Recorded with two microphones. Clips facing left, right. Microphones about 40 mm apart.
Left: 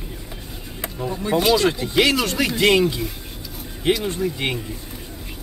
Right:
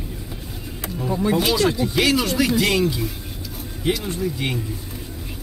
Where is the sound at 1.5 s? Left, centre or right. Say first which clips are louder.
Left 1 dB; centre.